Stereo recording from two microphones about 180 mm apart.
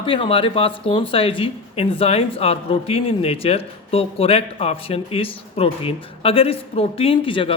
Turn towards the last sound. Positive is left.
turn(degrees=30)  # may be behind; listen again after turning